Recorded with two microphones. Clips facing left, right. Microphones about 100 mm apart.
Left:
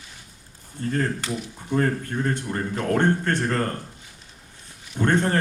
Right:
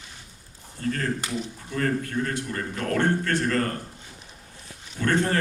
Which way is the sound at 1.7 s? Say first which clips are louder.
Left 3 dB; 30° left (ahead or behind).